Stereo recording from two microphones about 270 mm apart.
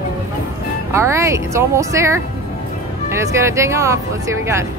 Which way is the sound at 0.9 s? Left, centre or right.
Centre.